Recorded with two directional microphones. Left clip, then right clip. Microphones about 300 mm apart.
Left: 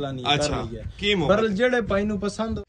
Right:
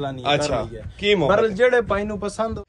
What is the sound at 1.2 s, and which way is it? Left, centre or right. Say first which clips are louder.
Speech: right 3 dB; centre.